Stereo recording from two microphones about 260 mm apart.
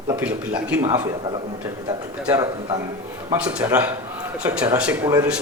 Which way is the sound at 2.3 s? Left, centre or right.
Centre.